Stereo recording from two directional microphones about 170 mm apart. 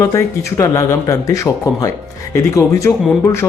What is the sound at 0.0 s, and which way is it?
Speech, 15° left (ahead or behind).